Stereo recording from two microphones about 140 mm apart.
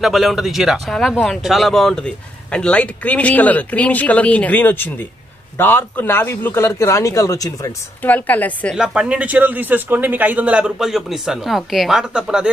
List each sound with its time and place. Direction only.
0.0 s speech: centre (ahead or behind); by 7.7 s 25° left (ahead or behind)
8.0 s speech: 10° left (ahead or behind)
8.7 s a man's voice: 5° right (ahead or behind)